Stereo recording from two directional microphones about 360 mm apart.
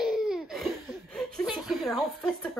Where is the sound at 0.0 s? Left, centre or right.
Centre.